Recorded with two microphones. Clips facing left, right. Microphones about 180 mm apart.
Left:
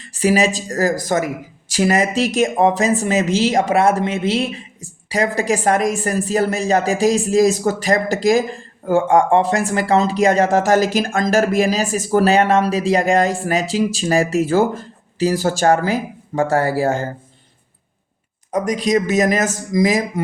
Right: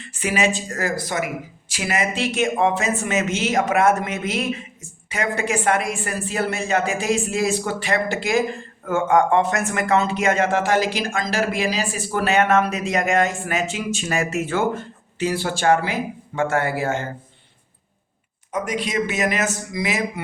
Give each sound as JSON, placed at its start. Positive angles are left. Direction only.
{"t": 0.0, "sound": "speech", "side_deg": 35}
{"t": 18.5, "sound": "speech", "side_deg": 40}